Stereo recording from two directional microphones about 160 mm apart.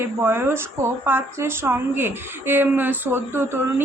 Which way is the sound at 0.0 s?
15° right (ahead or behind).